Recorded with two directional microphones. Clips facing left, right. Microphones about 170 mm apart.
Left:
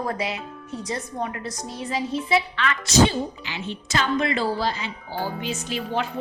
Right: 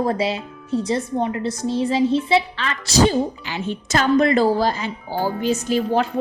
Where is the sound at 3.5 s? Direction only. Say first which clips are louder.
Right 6 dB; 45° right (ahead or behind).